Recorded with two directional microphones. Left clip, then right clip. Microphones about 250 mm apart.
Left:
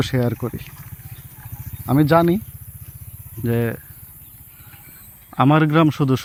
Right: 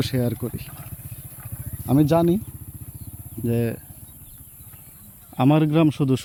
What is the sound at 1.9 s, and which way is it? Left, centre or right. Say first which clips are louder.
Speech: left 3 dB; centre.